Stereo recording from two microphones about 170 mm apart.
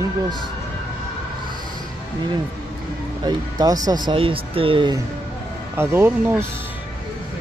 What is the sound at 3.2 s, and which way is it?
Speech, 20° right (ahead or behind).